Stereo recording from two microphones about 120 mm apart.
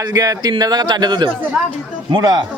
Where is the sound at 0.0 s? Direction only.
30° right (ahead or behind).